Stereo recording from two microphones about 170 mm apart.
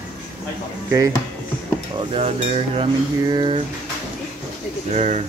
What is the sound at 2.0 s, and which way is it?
Cutlery, 35° right (ahead or behind).